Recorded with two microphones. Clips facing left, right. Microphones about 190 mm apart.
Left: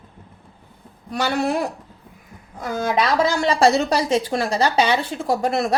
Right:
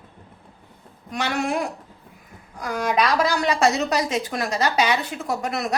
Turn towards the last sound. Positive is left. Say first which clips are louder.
# left 5 dB
turn(degrees=30)  # may be behind; listen again after turning